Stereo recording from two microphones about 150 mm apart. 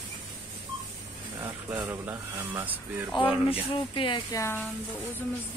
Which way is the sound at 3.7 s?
35° left (ahead or behind).